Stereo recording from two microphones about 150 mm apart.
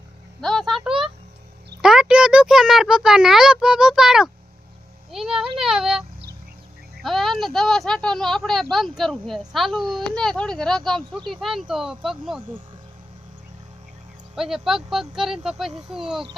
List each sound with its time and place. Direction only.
0.4 s a sound: centre (ahead or behind)
1.8 s speech: 5° right (ahead or behind)
14.3 s speech: centre (ahead or behind)